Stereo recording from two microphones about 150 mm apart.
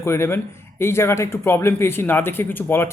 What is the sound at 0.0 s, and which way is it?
Speech, 15° left (ahead or behind).